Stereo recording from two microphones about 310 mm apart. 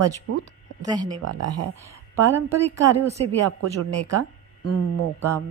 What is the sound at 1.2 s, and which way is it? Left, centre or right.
Speech, right.